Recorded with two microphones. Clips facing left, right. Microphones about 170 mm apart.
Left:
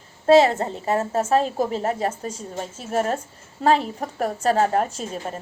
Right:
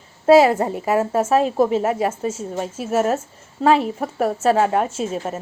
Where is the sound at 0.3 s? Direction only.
10° right (ahead or behind).